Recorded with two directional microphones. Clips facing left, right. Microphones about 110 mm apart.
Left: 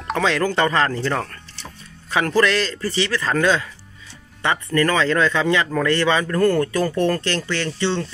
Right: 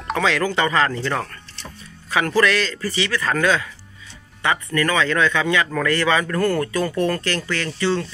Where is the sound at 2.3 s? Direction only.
30° left (ahead or behind).